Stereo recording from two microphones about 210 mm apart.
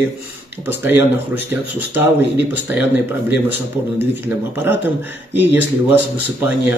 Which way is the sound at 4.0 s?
10° right (ahead or behind).